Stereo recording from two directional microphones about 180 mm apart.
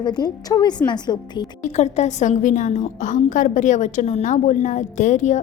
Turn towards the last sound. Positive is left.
turn(degrees=40)  # may be behind; listen again after turning